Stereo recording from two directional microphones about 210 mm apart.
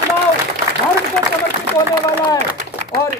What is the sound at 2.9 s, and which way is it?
Speech, 45° right (ahead or behind).